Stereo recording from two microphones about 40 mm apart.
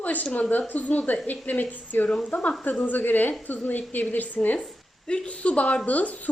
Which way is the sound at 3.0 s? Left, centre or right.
Left.